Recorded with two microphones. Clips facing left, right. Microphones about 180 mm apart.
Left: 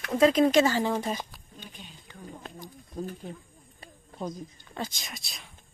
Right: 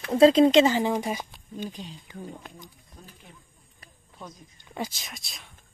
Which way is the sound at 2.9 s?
35° left (ahead or behind).